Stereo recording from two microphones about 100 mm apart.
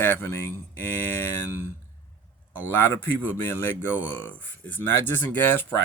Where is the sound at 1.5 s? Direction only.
20° right (ahead or behind).